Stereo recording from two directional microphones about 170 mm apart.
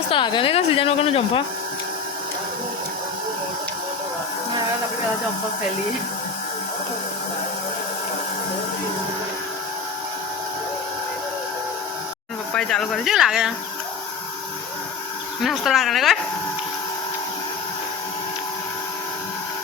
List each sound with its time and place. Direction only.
0.1 s a woman's voice: 30° left (ahead or behind)
12.5 s speech: 5° left (ahead or behind)
15.4 s speech: centre (ahead or behind)